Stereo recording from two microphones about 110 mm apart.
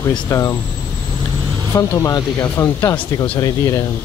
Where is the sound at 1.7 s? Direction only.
30° left (ahead or behind).